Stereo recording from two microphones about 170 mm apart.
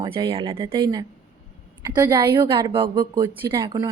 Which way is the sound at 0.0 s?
30° right (ahead or behind).